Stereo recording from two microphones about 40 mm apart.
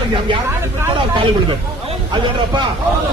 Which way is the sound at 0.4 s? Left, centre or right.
Right.